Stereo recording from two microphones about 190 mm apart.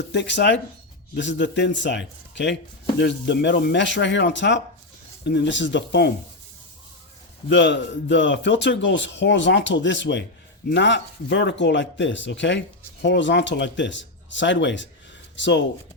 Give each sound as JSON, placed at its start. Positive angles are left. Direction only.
{"t": 0.1, "sound": "speech", "side_deg": 65}
{"t": 7.5, "sound": "speech", "side_deg": 70}